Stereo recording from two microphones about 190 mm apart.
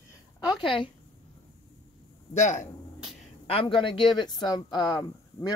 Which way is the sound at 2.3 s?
40° left (ahead or behind).